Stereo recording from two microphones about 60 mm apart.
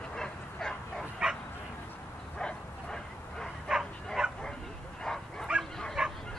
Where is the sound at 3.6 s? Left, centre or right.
Centre.